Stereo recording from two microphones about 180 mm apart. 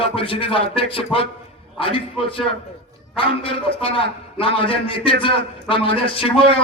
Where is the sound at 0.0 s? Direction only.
30° left (ahead or behind).